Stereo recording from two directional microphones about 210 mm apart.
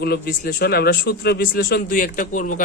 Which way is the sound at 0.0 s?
50° left (ahead or behind).